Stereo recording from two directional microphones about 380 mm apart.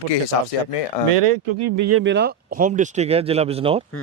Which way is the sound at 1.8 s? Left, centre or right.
Right.